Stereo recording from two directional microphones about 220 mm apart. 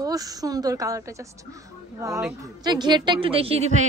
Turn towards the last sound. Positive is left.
turn(degrees=-30)  # may be behind; listen again after turning